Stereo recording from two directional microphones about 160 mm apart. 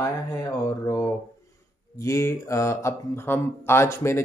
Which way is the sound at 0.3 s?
20° left (ahead or behind).